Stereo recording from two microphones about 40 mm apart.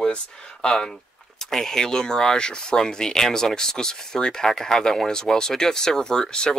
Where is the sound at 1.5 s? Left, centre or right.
Centre.